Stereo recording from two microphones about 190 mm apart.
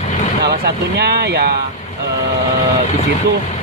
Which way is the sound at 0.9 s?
60° right (ahead or behind).